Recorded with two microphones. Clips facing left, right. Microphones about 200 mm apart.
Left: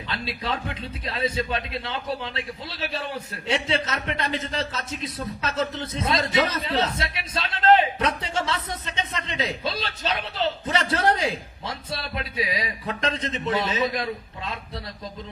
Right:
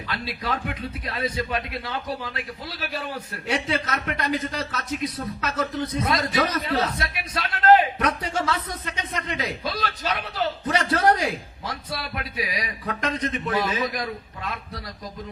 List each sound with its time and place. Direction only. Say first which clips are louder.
0.1 s a man's voice: even; 25° left (ahead or behind)